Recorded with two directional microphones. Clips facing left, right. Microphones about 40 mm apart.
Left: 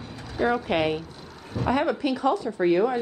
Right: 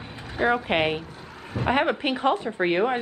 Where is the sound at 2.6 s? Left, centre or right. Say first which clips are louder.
Left 2 dB; right.